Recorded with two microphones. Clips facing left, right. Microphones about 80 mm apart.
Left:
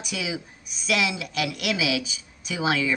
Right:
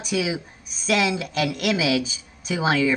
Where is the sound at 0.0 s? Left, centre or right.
Right.